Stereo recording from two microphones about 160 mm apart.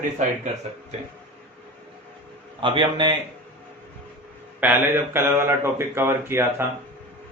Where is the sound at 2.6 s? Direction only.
30° right (ahead or behind).